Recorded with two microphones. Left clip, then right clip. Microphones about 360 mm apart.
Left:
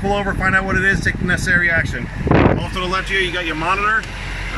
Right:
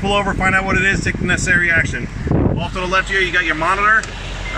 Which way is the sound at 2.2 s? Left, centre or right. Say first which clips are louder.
Left 6 dB; left.